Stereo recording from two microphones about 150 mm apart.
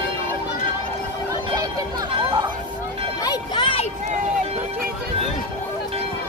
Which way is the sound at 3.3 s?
35° left (ahead or behind).